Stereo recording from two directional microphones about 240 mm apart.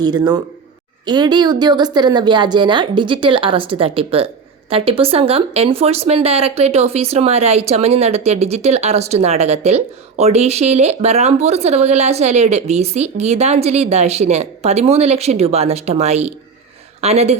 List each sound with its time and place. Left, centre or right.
0.0 s speech: centre